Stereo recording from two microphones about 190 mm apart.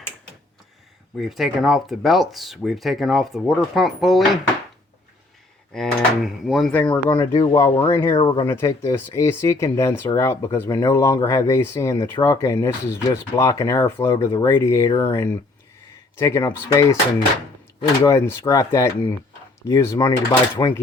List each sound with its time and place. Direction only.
1.1 s speech: centre (ahead or behind)
5.7 s speech: centre (ahead or behind)
8.1 s speech: 25° left (ahead or behind)
18.0 s speech: 15° left (ahead or behind)